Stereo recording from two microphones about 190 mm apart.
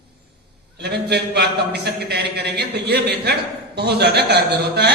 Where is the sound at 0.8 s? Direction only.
60° right (ahead or behind).